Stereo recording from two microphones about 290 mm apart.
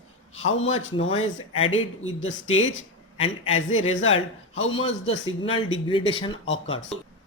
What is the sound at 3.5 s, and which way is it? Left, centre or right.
Speech, left.